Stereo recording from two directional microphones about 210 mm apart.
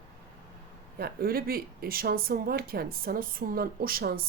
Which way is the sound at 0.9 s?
45° right (ahead or behind).